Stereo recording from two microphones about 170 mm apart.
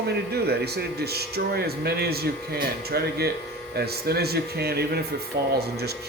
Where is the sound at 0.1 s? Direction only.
70° right (ahead or behind).